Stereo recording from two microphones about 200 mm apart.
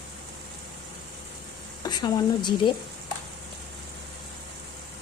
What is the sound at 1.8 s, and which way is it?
Speech, 20° left (ahead or behind).